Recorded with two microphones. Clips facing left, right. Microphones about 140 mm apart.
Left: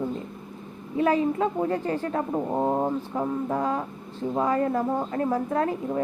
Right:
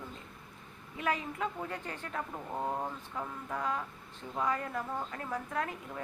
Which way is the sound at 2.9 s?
35° left (ahead or behind).